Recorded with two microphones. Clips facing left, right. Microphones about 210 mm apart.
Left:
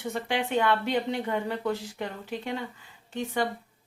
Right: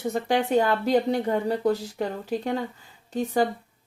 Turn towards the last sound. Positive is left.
turn(degrees=-40)  # may be behind; listen again after turning